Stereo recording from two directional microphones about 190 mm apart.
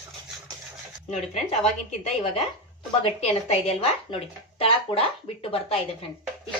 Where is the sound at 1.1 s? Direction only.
35° left (ahead or behind).